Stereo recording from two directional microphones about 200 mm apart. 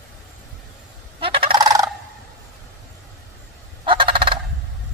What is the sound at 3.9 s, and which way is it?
Honk, 25° right (ahead or behind).